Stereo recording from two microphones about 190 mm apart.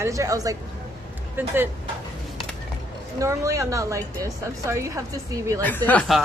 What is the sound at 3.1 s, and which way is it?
A woman's voice, 15° right (ahead or behind).